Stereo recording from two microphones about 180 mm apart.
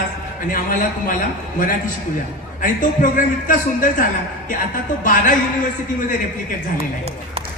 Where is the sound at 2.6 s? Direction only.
45° left (ahead or behind).